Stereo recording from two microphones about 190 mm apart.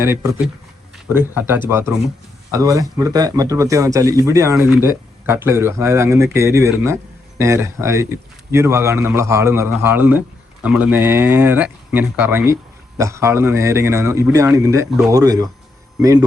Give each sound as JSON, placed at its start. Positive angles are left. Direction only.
{"t": 0.0, "sound": "speech", "side_deg": -15}